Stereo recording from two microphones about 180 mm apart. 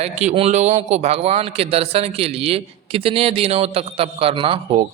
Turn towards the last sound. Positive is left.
turn(degrees=-35)  # may be behind; listen again after turning